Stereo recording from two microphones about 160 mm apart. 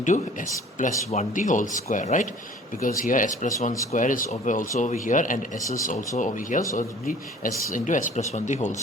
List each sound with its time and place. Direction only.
0.0 s speech: 50° left (ahead or behind)
5.5 s speech: 20° left (ahead or behind)
6.1 s speech: 50° left (ahead or behind)